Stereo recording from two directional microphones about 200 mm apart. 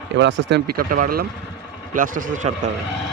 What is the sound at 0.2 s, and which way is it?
Speech, 65° right (ahead or behind).